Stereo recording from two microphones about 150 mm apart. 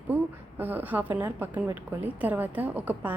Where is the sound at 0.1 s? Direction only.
10° right (ahead or behind).